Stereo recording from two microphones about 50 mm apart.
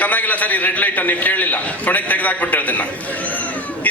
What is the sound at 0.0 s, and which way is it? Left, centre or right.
A man's voice, left.